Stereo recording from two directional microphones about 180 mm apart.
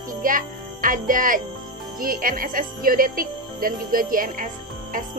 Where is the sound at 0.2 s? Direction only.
50° right (ahead or behind).